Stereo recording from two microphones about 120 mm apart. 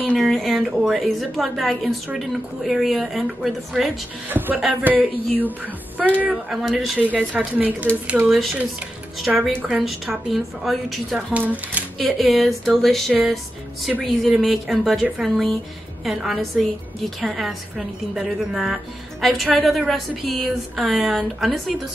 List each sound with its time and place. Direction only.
0.0 s a sound: 10° left (ahead or behind)
0.3 s a woman's voice: centre (ahead or behind)
4.3 s speech: 15° right (ahead or behind)
6.0 s a woman's voice: centre (ahead or behind)
11.3 s speech: 15° right (ahead or behind)
12.2 s a woman's voice: centre (ahead or behind)